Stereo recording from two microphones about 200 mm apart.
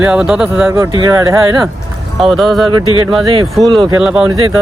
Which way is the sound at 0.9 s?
20° right (ahead or behind).